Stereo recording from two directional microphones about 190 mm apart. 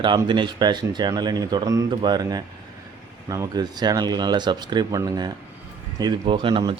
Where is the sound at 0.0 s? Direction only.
25° right (ahead or behind).